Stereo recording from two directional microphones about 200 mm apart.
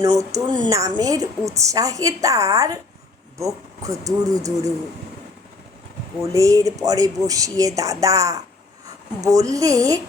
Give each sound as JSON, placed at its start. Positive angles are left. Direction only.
{"t": 0.0, "sound": "a woman's voice", "side_deg": -15}
{"t": 6.3, "sound": "a woman's voice", "side_deg": -15}